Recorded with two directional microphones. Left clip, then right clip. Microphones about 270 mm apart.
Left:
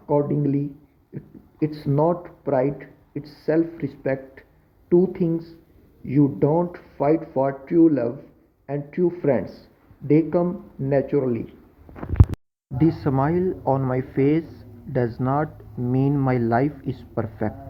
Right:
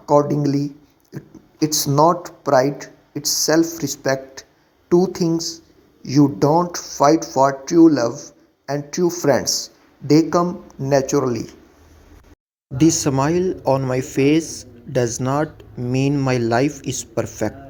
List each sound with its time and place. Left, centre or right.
0.1 s a man's voice: centre
12.7 s a man's voice: centre